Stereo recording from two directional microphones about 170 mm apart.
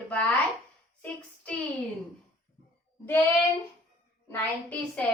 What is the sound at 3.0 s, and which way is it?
A woman's voice, 10° left (ahead or behind).